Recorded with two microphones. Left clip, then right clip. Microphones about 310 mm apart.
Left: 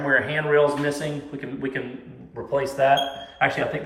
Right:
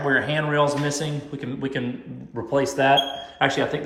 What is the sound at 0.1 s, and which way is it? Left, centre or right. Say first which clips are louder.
Speech: left 3 dB; centre.